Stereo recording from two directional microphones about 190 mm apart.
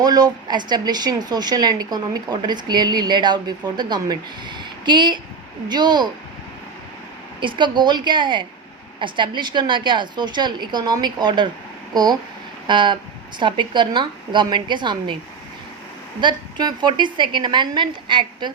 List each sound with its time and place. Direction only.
0.0 s speech: 20° right (ahead or behind)
7.3 s speech: 25° right (ahead or behind)
12.6 s speech: 25° right (ahead or behind)
16.2 s speech: 25° right (ahead or behind)